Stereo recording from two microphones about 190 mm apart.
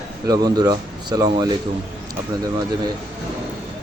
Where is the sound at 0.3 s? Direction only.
20° right (ahead or behind).